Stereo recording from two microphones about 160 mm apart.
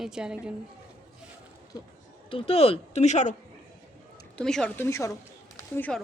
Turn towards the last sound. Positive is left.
turn(degrees=10)  # may be behind; listen again after turning